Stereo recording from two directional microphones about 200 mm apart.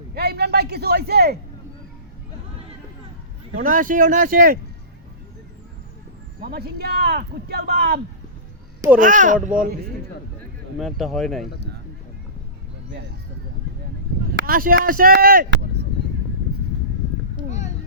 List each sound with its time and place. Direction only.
0.1 s a sound: 55° right (ahead or behind)
3.5 s speech: 40° right (ahead or behind)
6.4 s speech: 50° right (ahead or behind)
9.0 s speech: 40° right (ahead or behind)
10.8 s speech: centre (ahead or behind)
14.4 s speech: 45° right (ahead or behind)